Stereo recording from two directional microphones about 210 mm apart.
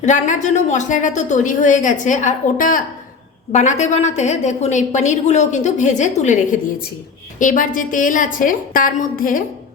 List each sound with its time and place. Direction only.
0.0 s a woman's voice: 35° left (ahead or behind)